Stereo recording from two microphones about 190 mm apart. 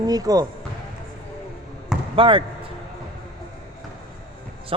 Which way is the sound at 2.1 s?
25° right (ahead or behind).